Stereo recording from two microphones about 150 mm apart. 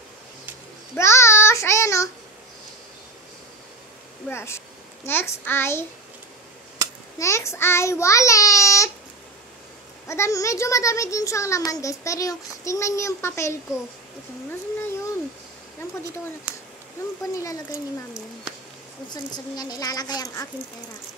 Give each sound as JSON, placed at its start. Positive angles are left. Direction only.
{"t": 0.9, "sound": "child singing", "side_deg": 15}
{"t": 4.3, "sound": "a child's voice", "side_deg": 15}
{"t": 7.2, "sound": "child singing", "side_deg": 20}
{"t": 10.0, "sound": "a child's voice", "side_deg": 20}
{"t": 17.2, "sound": "a child's voice", "side_deg": 20}
{"t": 19.0, "sound": "a child's voice", "side_deg": 30}